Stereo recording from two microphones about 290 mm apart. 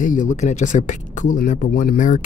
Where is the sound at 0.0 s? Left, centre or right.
Left.